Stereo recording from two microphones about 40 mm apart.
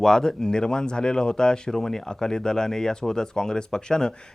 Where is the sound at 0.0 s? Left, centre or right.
Centre.